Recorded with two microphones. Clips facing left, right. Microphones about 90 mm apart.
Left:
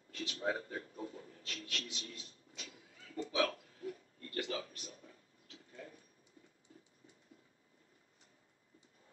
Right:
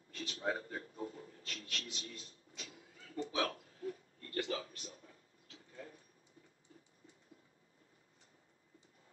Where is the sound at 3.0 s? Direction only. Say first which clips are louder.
Left 2 dB; 35° right (ahead or behind).